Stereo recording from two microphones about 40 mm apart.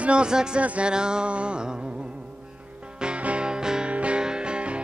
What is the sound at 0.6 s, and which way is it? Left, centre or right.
Music, right.